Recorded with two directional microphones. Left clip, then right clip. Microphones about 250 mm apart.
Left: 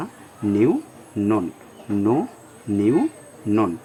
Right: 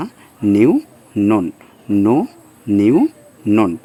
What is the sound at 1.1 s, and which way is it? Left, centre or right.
Speech, right.